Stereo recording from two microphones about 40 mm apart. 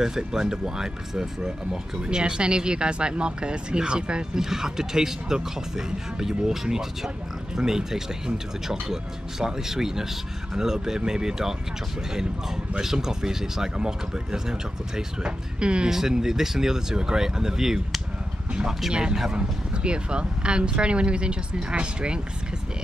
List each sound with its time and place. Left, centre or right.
0.0 s speech: centre
4.4 s speech: centre
12.7 s speech: centre
15.9 s speech: centre